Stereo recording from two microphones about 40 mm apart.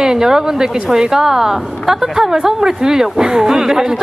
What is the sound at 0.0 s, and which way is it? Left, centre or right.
Speech, centre.